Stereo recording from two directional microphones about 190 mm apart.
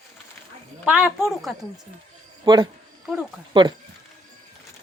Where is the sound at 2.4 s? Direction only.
25° right (ahead or behind).